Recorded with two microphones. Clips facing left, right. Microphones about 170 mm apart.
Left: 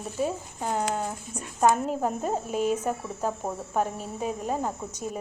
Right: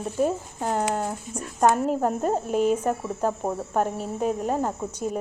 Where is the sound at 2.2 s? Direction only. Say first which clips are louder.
Right 4 dB; 45° right (ahead or behind).